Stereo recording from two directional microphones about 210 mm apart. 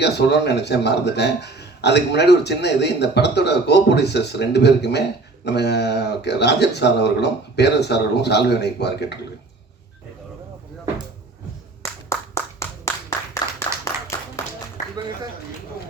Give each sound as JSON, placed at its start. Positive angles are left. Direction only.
{"t": 0.0, "sound": "a man's voice", "side_deg": 55}
{"t": 11.8, "sound": "clapping", "side_deg": 15}